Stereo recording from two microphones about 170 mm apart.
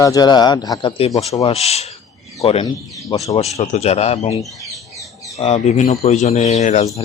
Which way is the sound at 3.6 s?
40° left (ahead or behind).